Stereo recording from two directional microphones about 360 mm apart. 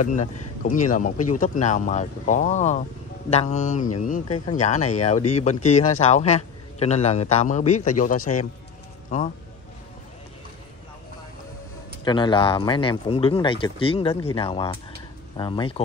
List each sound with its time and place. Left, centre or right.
0.0 s speech: left
8.2 s a man's voice: left
9.1 s speech: centre
12.0 s speech: centre